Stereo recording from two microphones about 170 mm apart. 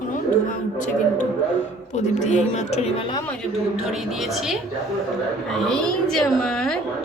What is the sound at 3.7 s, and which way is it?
A woman's voice, 5° right (ahead or behind).